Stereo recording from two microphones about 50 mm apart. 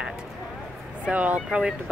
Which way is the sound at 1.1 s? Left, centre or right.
Right.